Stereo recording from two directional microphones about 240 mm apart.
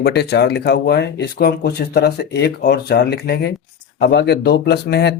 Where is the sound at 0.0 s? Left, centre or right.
Left.